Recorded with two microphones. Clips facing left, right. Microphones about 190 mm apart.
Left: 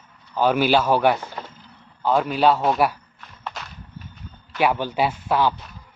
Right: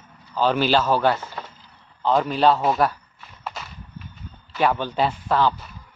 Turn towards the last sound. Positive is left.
turn(degrees=10)  # may be behind; listen again after turning